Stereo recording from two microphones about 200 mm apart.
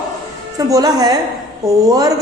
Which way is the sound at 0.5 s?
15° right (ahead or behind).